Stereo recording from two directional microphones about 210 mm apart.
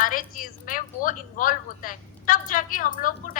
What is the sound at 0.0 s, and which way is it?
A woman's voice, 40° left (ahead or behind).